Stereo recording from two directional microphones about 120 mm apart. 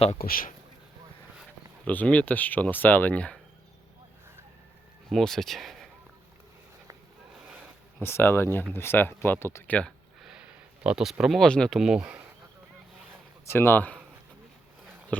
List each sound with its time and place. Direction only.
1.8 s speech: 10° left (ahead or behind)
5.0 s speech: centre (ahead or behind)
8.0 s speech: 20° left (ahead or behind)
9.7 s a sound: centre (ahead or behind)
10.8 s speech: 5° right (ahead or behind)
13.4 s speech: 20° left (ahead or behind)